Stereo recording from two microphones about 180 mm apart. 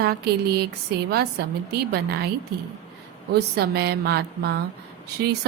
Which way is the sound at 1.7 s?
60° right (ahead or behind).